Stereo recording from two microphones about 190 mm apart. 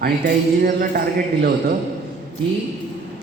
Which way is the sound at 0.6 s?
50° right (ahead or behind).